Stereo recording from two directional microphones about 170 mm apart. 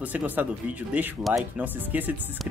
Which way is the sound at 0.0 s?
10° right (ahead or behind).